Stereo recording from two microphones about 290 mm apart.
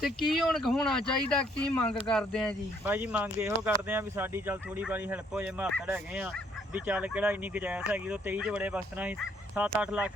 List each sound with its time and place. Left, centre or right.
0.0 s speech: centre